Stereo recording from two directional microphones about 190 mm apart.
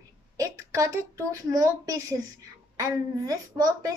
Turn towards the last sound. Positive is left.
turn(degrees=-20)  # may be behind; listen again after turning